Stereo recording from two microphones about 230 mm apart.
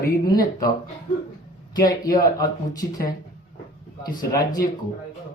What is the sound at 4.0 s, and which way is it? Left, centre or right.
Speech, centre.